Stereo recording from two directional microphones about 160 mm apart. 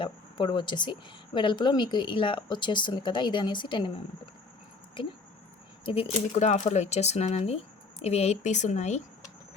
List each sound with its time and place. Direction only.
0.0 s speech: 30° left (ahead or behind); by 9.0 s 45° left (ahead or behind)